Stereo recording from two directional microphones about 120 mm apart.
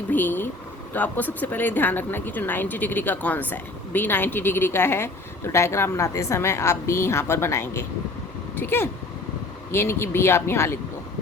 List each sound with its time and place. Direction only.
0.1 s speech: 15° left (ahead or behind)